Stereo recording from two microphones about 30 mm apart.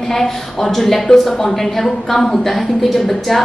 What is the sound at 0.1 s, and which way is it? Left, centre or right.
A woman's voice, centre.